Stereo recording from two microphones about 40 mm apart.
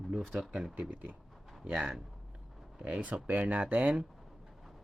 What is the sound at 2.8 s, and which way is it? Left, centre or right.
Speech, right.